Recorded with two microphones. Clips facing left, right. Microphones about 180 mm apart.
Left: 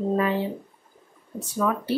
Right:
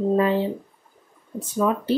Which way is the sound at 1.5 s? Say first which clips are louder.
Right 3 dB; 20° right (ahead or behind).